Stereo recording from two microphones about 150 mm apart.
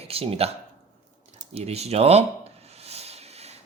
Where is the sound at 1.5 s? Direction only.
45° right (ahead or behind).